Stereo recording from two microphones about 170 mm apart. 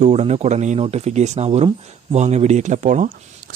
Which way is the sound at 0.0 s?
40° right (ahead or behind).